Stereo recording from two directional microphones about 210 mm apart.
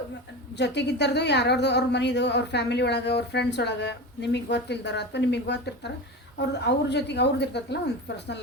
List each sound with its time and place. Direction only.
0.5 s a woman's voice: 55° left (ahead or behind)